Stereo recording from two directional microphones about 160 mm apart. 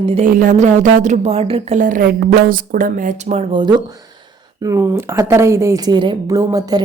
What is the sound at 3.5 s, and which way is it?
Speech, 30° right (ahead or behind).